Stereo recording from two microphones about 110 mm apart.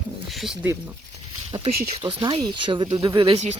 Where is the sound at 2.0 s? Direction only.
45° right (ahead or behind).